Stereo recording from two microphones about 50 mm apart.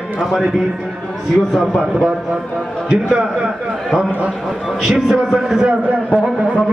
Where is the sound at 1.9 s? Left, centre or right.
Centre.